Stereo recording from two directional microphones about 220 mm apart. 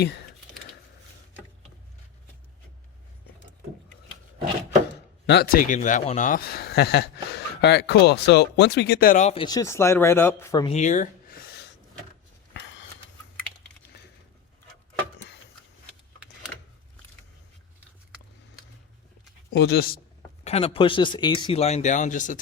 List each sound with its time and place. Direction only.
5.2 s speech: 45° left (ahead or behind); by 10.7 s 15° left (ahead or behind)
10.7 s a sound: 30° left (ahead or behind); by 11.7 s 45° left (ahead or behind)
19.5 s speech: 45° left (ahead or behind)
20.4 s speech: 25° left (ahead or behind)